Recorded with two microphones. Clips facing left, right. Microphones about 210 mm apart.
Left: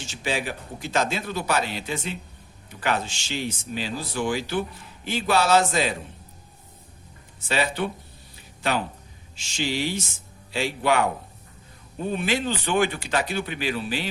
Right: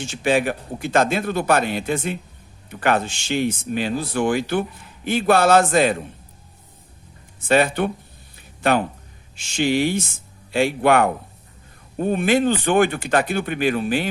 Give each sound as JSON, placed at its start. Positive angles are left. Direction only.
{"t": 0.0, "sound": "speech", "side_deg": -55}
{"t": 7.4, "sound": "speech", "side_deg": -55}